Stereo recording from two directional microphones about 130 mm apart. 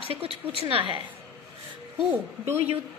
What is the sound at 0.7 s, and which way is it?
Speech, 45° right (ahead or behind).